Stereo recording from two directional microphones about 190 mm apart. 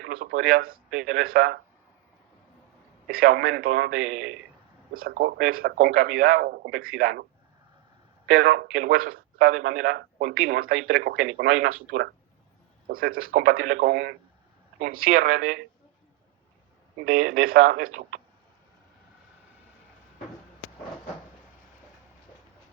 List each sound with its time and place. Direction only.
0.0 s a man's voice: 50° right (ahead or behind)
3.1 s a man's voice: 50° right (ahead or behind)
8.3 s a man's voice: 55° right (ahead or behind)
17.1 s a man's voice: 50° right (ahead or behind)